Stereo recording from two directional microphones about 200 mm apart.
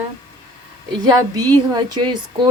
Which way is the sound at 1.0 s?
20° right (ahead or behind).